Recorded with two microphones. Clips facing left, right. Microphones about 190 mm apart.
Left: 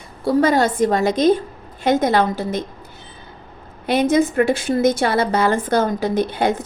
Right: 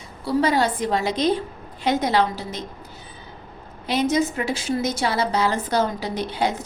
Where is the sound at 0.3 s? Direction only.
45° left (ahead or behind).